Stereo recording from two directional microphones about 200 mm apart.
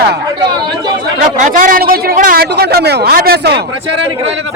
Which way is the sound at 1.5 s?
40° right (ahead or behind).